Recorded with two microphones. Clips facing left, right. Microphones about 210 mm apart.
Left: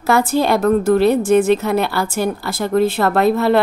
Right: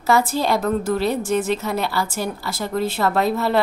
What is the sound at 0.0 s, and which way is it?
A woman's voice, 60° left (ahead or behind).